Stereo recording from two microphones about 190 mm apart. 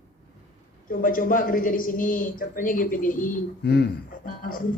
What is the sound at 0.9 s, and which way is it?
A woman's voice, 45° left (ahead or behind).